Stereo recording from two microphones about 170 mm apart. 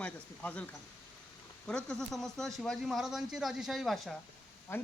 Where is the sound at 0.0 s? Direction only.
10° left (ahead or behind).